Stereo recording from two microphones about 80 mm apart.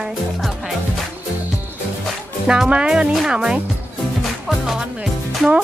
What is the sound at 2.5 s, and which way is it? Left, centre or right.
Speech, centre.